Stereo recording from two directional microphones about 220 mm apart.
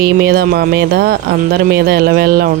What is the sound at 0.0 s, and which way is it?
Speech, 45° right (ahead or behind).